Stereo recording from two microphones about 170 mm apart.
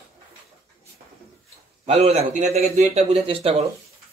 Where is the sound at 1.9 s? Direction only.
40° right (ahead or behind).